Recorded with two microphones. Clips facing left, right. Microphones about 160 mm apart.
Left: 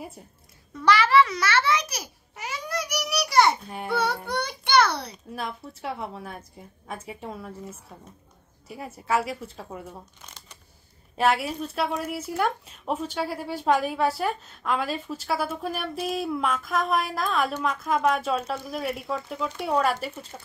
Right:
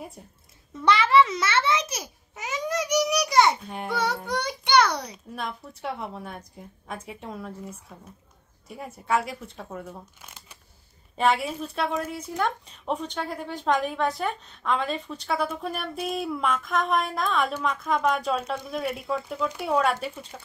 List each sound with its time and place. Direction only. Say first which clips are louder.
0.8 s a child's voice: even; 25° right (ahead or behind)
3.6 s speech: right 1 dB; centre (ahead or behind)
4.3 s a child's voice: right 1 dB; 15° right (ahead or behind)
5.3 s speech: left 1 dB; centre (ahead or behind)
8.6 s speech: even; 5° left (ahead or behind)
10.2 s shuffling cards: even; 5° right (ahead or behind)
11.1 s speech: even; 5° left (ahead or behind)